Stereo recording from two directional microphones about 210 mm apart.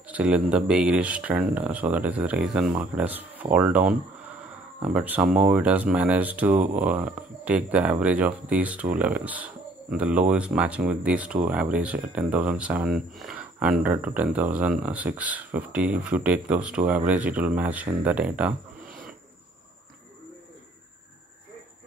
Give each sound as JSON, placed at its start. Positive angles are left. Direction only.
{"t": 0.1, "sound": "speech", "side_deg": -5}
{"t": 18.9, "sound": "cricket", "side_deg": -40}